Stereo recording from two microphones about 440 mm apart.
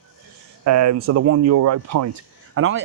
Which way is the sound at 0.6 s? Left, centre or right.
Right.